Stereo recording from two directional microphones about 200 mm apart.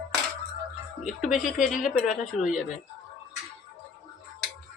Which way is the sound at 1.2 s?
5° right (ahead or behind).